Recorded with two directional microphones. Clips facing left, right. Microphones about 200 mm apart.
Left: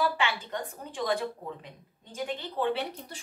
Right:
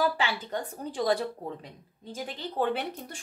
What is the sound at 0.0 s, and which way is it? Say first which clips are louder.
A woman's voice: right 1 dB; 35° right (ahead or behind).